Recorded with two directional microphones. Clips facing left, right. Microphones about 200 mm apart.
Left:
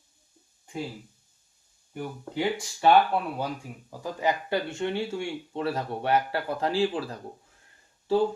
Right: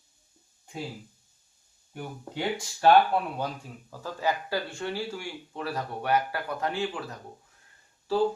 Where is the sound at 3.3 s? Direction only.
10° left (ahead or behind); by 7.2 s 30° left (ahead or behind).